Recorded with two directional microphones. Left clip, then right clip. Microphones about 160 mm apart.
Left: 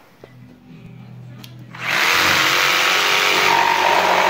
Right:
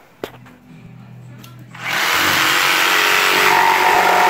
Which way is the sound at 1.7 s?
30° left (ahead or behind).